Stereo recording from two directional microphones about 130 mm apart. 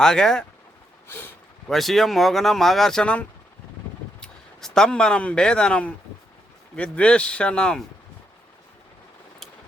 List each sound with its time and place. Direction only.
0.0 s speech: 5° left (ahead or behind)
1.0 s a sound: 15° left (ahead or behind)
1.6 s speech: centre (ahead or behind)